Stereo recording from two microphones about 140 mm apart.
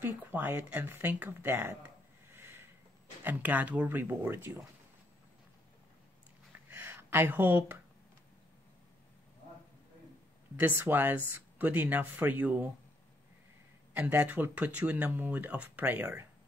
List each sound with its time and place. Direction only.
0.0 s speech: 15° right (ahead or behind)
2.3 s a sound: 15° right (ahead or behind)
3.3 s speech: 10° right (ahead or behind)
6.7 s a sound: 15° right (ahead or behind)
10.5 s speech: 15° right (ahead or behind)
13.9 s speech: 15° right (ahead or behind)